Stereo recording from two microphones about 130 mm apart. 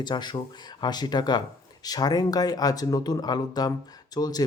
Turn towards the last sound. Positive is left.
turn(degrees=30)  # may be behind; listen again after turning